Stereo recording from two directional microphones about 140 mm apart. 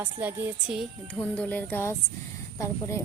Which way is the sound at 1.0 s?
10° left (ahead or behind).